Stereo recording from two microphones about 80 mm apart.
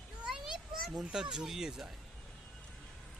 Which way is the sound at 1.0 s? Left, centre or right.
Centre.